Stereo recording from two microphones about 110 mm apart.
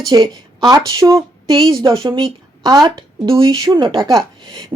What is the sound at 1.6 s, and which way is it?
Speech, 45° right (ahead or behind).